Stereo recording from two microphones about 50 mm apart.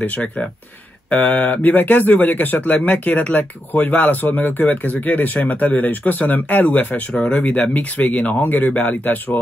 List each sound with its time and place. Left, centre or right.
0.0 s speech: left
1.1 s a man's voice: left
7.1 s speech: centre
7.3 s a man's voice: left